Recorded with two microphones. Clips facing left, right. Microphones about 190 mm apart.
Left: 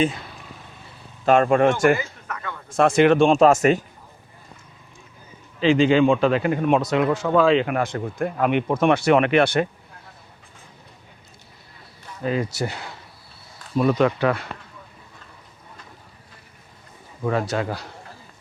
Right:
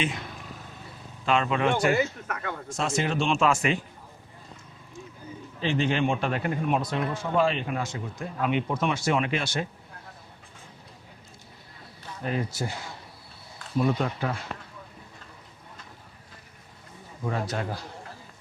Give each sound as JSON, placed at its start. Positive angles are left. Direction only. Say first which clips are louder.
{"t": 1.2, "sound": "speech", "louder": "left 8 dB", "side_deg": 45}
{"t": 2.0, "sound": "a sound", "louder": "right 5 dB", "side_deg": -50}
{"t": 2.7, "sound": "speech", "louder": "left 13 dB", "side_deg": 60}
{"t": 3.2, "sound": "speech", "louder": "left 9 dB", "side_deg": 40}
{"t": 5.5, "sound": "speech", "louder": "left 10 dB", "side_deg": 90}
{"t": 12.3, "sound": "speech", "louder": "left 5 dB", "side_deg": 85}
{"t": 13.7, "sound": "speech", "louder": "left 7 dB", "side_deg": 85}
{"t": 17.2, "sound": "a man's voice", "louder": "left 7 dB", "side_deg": 80}